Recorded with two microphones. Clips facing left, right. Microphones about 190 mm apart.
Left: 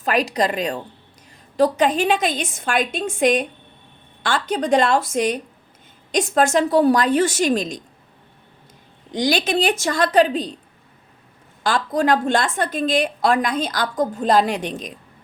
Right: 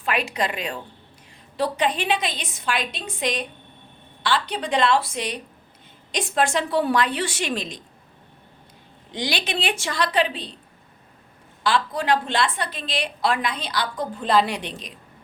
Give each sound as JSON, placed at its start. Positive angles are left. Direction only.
{"t": 0.0, "sound": "a woman's voice", "side_deg": 40}
{"t": 9.1, "sound": "a woman's voice", "side_deg": 40}
{"t": 11.6, "sound": "a woman's voice", "side_deg": 45}